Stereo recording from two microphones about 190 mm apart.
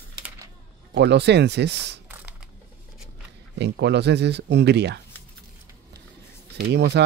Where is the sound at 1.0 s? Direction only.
65° right (ahead or behind).